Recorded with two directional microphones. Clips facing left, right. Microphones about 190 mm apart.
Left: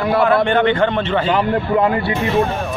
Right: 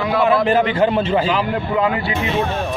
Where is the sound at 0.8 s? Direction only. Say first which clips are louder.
Right 1 dB; 10° right (ahead or behind).